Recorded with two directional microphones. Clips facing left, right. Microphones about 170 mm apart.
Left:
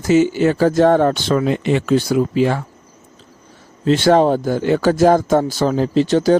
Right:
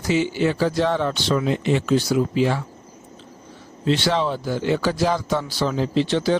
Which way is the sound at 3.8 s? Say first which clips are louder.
Left 8 dB; 45° left (ahead or behind).